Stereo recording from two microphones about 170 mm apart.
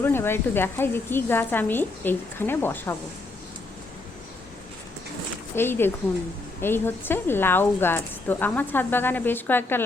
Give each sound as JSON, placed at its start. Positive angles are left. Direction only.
{"t": 0.0, "sound": "speech", "side_deg": 15}
{"t": 5.5, "sound": "speech", "side_deg": 15}